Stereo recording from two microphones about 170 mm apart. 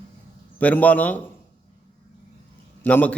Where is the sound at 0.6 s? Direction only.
10° left (ahead or behind).